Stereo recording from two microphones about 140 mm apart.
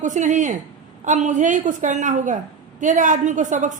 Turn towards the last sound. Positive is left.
turn(degrees=-60)  # may be behind; listen again after turning